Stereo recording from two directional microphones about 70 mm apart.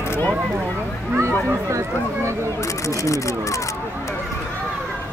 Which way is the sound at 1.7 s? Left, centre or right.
Right.